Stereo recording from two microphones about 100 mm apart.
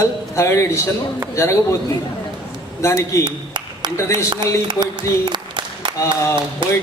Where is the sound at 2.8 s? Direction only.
30° left (ahead or behind).